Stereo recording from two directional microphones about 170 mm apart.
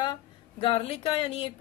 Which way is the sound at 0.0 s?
30° left (ahead or behind).